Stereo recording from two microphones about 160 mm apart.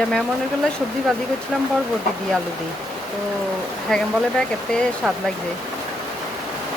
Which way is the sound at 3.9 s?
5° left (ahead or behind).